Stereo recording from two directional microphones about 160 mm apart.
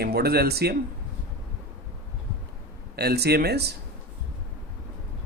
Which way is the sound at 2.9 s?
85° right.